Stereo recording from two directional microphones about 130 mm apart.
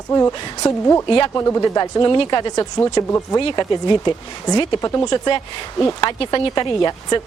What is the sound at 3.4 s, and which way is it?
Speech, 40° left (ahead or behind).